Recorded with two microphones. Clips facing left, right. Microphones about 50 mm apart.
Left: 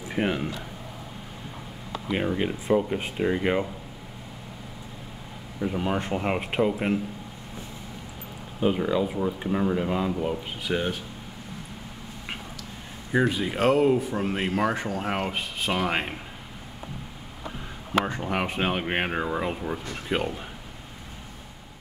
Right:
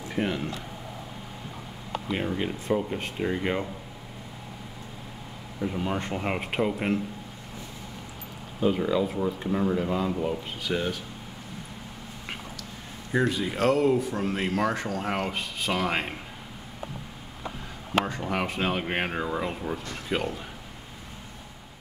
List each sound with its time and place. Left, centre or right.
0.1 s speech: centre
2.0 s speech: centre
5.6 s speech: centre
8.7 s speech: centre
13.1 s speech: centre
18.0 s speech: centre